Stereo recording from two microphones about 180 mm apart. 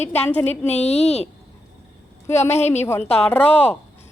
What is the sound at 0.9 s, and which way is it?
Speech, 35° left (ahead or behind).